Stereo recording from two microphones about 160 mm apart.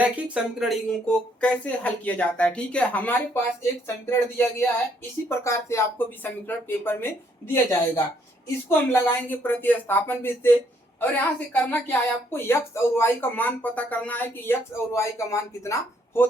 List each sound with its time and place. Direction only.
0.0 s a woman's voice: 5° right (ahead or behind); by 16.2 s 20° left (ahead or behind)